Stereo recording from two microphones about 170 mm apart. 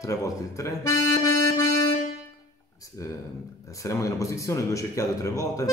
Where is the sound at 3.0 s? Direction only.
20° left (ahead or behind).